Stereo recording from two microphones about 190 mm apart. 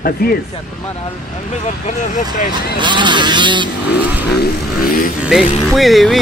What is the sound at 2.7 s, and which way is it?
Speech, 25° right (ahead or behind).